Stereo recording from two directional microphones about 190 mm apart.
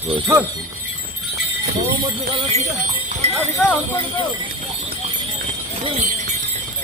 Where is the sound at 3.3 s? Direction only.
Centre (ahead or behind).